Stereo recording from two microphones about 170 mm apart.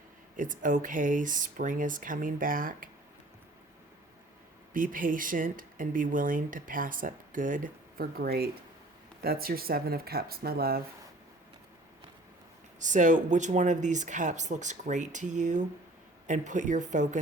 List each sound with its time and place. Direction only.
0.3 s speech: 50° right (ahead or behind)
4.7 s speech: 55° right (ahead or behind)
12.8 s speech: 45° right (ahead or behind)